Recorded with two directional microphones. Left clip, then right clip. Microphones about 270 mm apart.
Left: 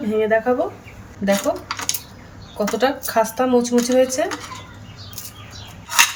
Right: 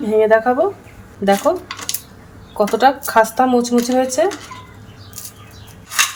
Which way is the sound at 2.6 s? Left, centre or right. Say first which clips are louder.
Right 6 dB; centre.